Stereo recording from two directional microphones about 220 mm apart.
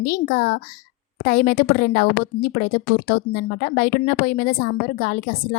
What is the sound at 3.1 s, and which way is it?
A woman's voice, 45° left (ahead or behind).